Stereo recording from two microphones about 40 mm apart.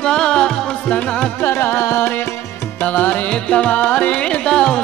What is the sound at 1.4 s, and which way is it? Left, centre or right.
Music, left.